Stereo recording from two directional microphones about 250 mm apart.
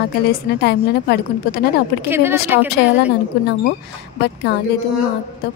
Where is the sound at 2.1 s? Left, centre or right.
Centre.